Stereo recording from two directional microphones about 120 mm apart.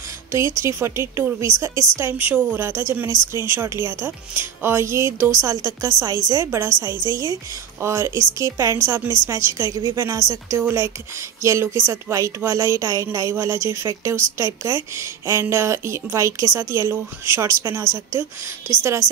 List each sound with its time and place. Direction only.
0.3 s a woman's voice: 25° right (ahead or behind)